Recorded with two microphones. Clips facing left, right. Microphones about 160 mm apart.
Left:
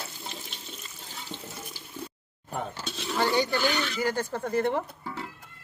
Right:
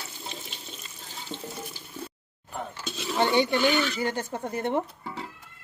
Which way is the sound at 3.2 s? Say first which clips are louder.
Right 3 dB; 25° right (ahead or behind).